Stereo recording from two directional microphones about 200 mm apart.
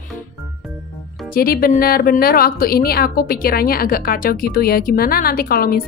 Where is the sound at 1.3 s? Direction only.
45° left (ahead or behind).